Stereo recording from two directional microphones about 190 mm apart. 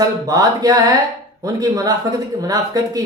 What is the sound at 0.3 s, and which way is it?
Speech, 20° right (ahead or behind).